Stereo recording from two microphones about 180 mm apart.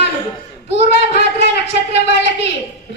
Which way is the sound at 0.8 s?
70° left (ahead or behind).